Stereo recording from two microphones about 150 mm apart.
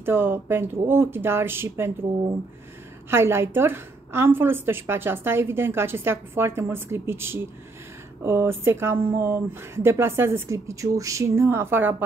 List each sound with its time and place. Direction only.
0.0 s a woman's voice: 15° right (ahead or behind)
3.1 s a woman's voice: 15° right (ahead or behind)